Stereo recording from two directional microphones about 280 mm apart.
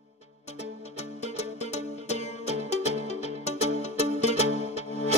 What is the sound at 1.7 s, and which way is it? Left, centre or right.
Music, left.